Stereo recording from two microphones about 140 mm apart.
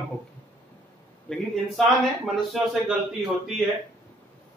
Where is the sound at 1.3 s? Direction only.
Centre (ahead or behind).